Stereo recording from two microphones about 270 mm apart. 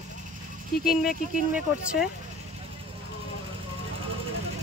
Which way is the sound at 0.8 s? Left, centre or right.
Centre.